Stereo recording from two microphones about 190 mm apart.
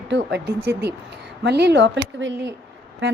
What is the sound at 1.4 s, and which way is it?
Speech, 60° right (ahead or behind).